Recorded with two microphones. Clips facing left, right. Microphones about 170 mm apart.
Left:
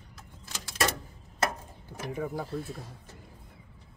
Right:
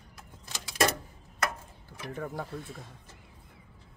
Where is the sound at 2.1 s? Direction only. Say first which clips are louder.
Left 3 dB; 5° left (ahead or behind).